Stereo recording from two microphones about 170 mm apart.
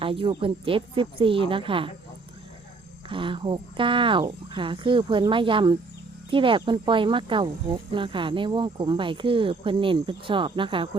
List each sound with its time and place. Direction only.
0.0 s speech: 30° right (ahead or behind)
3.1 s speech: 30° right (ahead or behind)